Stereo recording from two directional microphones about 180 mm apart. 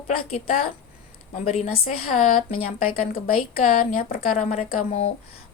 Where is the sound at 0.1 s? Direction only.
50° left (ahead or behind).